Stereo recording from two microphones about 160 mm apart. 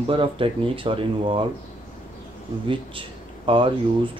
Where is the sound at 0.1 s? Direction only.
35° right (ahead or behind).